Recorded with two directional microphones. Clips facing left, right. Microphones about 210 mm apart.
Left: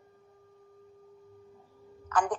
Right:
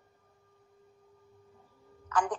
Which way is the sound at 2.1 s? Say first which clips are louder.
Left 2 dB; 50° left (ahead or behind).